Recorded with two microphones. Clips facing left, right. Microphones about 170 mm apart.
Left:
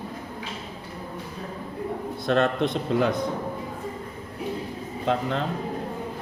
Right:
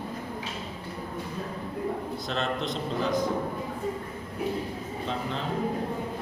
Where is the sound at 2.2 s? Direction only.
60° left (ahead or behind).